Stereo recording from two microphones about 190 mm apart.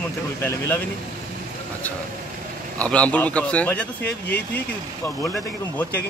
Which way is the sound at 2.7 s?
5° left (ahead or behind).